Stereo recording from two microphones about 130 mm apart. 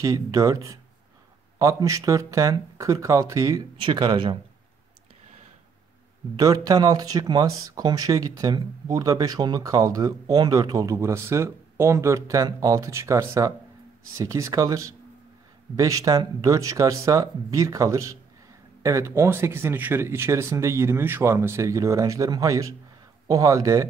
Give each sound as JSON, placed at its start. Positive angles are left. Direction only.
{"t": 0.0, "sound": "speech", "side_deg": -25}
{"t": 6.3, "sound": "speech", "side_deg": -30}